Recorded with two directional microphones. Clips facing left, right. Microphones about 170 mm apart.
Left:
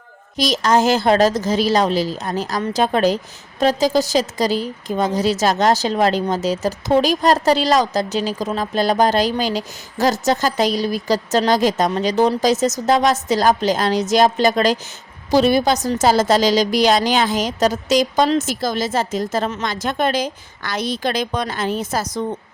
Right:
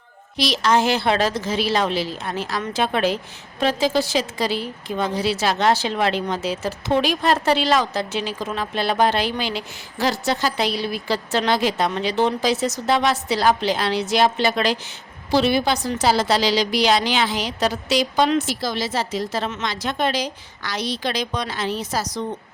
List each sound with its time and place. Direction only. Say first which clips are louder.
0.3 s a woman's voice: left 3 dB; 45° left (ahead or behind)